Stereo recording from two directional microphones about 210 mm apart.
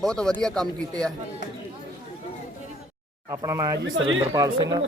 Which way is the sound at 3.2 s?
15° right (ahead or behind).